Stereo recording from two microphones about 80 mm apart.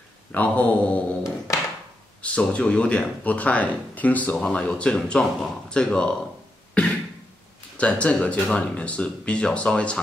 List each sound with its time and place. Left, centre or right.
0.3 s speech: centre
2.2 s speech: centre
6.7 s a sound: centre
7.7 s speech: centre